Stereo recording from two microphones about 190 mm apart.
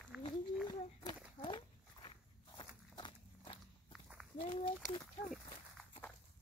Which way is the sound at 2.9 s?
25° left (ahead or behind).